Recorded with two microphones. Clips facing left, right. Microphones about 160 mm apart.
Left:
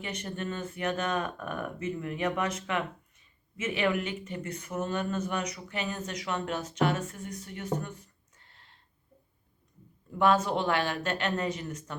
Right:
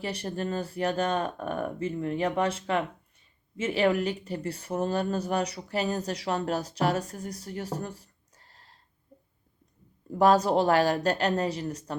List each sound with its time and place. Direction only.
0.0 s speech: 35° right (ahead or behind)
10.1 s speech: 40° right (ahead or behind)